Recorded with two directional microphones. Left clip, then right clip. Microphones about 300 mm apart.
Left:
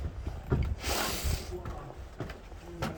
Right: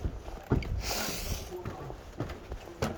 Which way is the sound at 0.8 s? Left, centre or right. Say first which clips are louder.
Left 2 dB; left.